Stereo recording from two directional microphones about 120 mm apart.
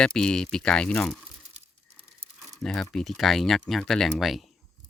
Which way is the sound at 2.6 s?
5° left (ahead or behind).